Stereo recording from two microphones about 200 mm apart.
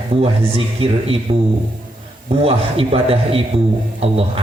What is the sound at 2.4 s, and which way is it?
A man's voice, 30° right (ahead or behind).